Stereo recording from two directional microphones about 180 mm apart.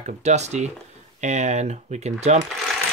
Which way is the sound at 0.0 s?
40° right (ahead or behind).